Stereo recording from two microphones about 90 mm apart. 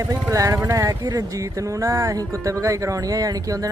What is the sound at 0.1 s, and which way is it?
Speech, 35° right (ahead or behind).